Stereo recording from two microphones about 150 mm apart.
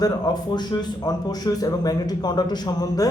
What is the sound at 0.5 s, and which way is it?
A man's voice, 30° left (ahead or behind).